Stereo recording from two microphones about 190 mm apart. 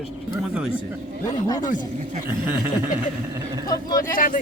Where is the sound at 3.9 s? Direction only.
45° left (ahead or behind).